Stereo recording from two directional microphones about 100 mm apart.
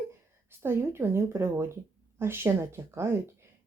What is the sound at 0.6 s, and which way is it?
A child's voice, 25° right (ahead or behind).